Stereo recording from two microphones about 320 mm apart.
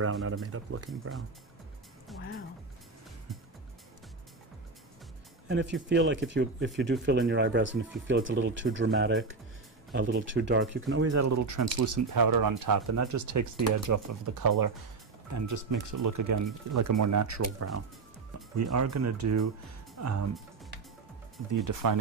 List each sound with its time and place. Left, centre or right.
0.0 s speech: right
2.1 s music: centre
3.3 s music: centre
5.5 s speech: right
11.1 s speech: right
15.3 s speech: right